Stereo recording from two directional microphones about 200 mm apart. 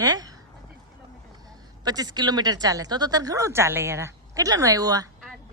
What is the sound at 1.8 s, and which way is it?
Speech, 20° right (ahead or behind).